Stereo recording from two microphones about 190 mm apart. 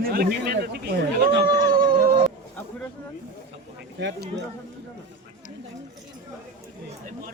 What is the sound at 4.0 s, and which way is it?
Speech, 70° right (ahead or behind).